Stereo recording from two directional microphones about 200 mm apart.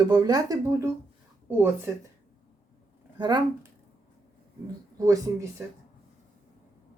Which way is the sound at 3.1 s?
20° right (ahead or behind).